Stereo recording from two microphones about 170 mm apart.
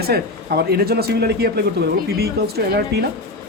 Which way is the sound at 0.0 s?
70° right (ahead or behind).